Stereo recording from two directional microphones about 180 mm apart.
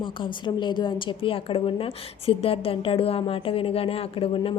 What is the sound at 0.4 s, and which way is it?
A woman's voice, 25° left (ahead or behind).